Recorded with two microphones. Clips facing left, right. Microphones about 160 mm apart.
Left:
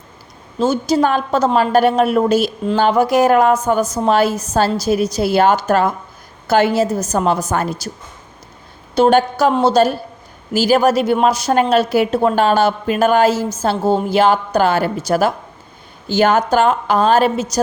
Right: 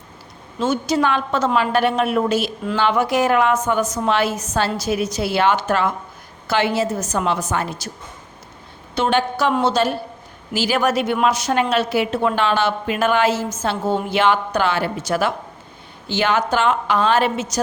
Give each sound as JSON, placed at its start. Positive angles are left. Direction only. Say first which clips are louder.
{"t": 0.6, "sound": "a woman's voice", "louder": "left 4 dB", "side_deg": 35}
{"t": 9.0, "sound": "a woman's voice", "louder": "left 6 dB", "side_deg": 40}